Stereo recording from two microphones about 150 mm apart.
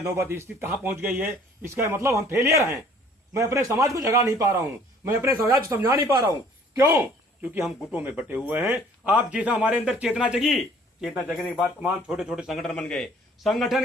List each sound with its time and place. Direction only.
0.0 s a man's voice: 15° right (ahead or behind); by 13.8 s centre (ahead or behind)